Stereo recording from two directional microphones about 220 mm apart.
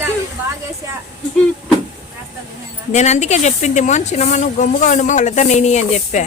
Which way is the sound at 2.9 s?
30° left (ahead or behind).